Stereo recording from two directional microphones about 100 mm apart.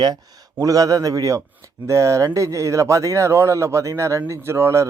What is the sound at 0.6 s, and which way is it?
A man's voice, 35° right (ahead or behind).